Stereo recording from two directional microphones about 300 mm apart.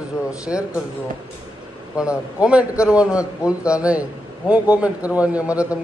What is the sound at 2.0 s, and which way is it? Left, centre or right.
A man's voice, centre.